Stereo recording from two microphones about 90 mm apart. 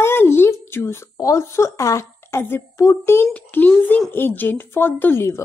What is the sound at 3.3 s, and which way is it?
A woman's voice, 20° left (ahead or behind).